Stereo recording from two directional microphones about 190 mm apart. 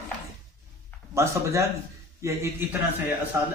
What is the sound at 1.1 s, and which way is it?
Speech, 15° right (ahead or behind).